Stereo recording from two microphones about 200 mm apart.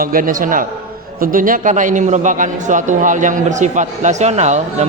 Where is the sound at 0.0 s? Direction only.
45° right (ahead or behind).